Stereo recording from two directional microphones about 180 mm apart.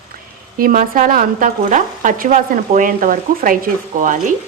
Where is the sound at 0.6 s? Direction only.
50° right (ahead or behind).